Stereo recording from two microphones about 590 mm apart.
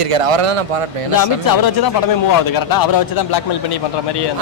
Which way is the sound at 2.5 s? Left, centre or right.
Left.